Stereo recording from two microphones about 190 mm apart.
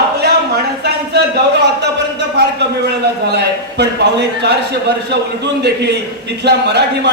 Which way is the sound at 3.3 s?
60° right (ahead or behind).